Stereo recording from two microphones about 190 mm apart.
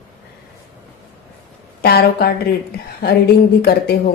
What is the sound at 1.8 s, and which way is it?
Speech, 55° left (ahead or behind).